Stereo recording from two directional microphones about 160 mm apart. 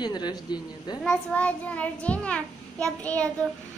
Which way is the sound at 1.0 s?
10° left (ahead or behind).